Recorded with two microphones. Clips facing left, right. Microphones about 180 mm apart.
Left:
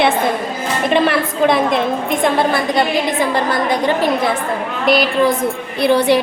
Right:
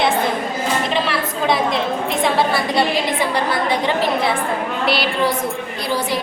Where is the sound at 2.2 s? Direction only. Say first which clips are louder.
Left 3 dB; 50° left (ahead or behind).